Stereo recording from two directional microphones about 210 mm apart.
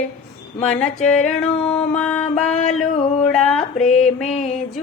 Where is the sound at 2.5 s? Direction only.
35° left (ahead or behind).